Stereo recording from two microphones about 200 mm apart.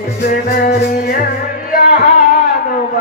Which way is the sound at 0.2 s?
45° left (ahead or behind).